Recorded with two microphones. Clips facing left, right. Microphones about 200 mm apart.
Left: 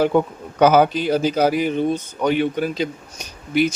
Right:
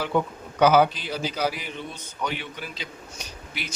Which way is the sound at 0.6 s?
50° left (ahead or behind).